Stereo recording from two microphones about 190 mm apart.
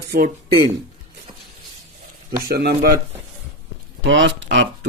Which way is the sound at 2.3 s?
55° right (ahead or behind).